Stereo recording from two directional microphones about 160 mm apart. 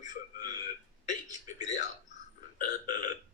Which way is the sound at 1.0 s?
50° left (ahead or behind).